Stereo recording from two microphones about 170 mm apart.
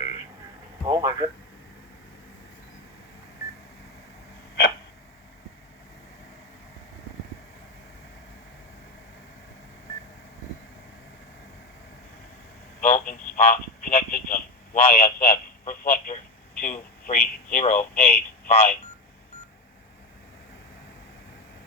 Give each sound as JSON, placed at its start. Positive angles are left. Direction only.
{"t": 0.9, "sound": "speech", "side_deg": -20}
{"t": 12.8, "sound": "telephone", "side_deg": 50}
{"t": 14.8, "sound": "a man's voice", "side_deg": 35}
{"t": 15.7, "sound": "telephone", "side_deg": 50}